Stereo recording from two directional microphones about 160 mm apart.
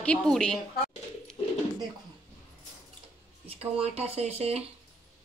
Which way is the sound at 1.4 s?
30° left (ahead or behind).